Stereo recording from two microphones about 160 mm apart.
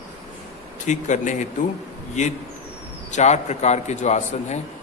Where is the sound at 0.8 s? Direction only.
50° left (ahead or behind).